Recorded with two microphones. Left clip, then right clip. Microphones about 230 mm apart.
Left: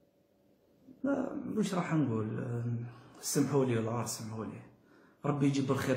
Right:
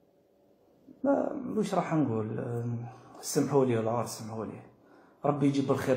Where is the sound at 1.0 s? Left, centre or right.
Centre.